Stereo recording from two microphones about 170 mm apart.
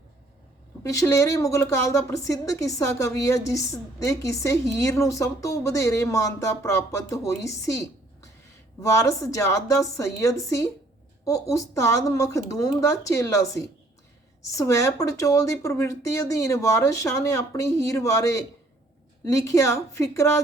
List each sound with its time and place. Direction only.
0.8 s a woman's voice: 20° left (ahead or behind)